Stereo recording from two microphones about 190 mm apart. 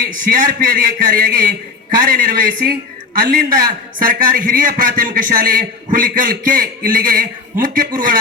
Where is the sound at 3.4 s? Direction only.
50° right (ahead or behind).